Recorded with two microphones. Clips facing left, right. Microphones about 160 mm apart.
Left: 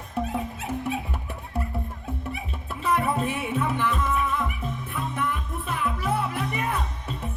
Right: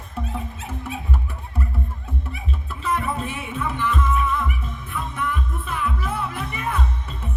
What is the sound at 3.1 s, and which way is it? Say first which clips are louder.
Music: left 2 dB; 50° left (ahead or behind).